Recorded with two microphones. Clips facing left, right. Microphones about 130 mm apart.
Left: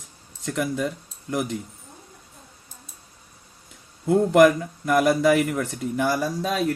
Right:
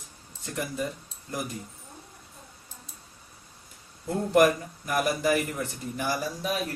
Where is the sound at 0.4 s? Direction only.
70° left (ahead or behind).